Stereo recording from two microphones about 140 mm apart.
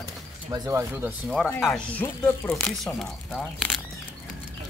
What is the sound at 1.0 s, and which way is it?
Speech, 5° right (ahead or behind).